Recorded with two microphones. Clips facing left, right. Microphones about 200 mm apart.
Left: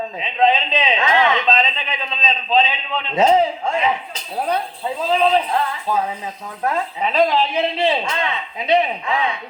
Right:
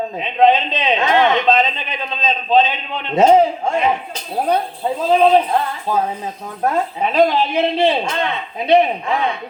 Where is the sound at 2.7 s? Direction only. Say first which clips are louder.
Right 3 dB; 55° right (ahead or behind).